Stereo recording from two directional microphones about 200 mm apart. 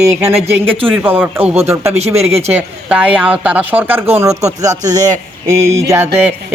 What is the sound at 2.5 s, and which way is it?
Speech, 5° right (ahead or behind).